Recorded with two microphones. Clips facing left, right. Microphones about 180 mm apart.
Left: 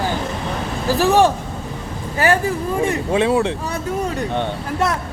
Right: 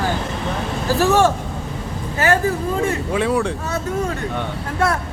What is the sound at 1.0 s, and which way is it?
Speech, 15° left (ahead or behind).